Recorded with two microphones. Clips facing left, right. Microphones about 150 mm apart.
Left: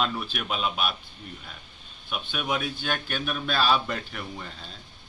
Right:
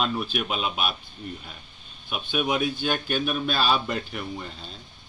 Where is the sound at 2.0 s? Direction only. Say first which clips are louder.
Right 4 dB; 5° right (ahead or behind).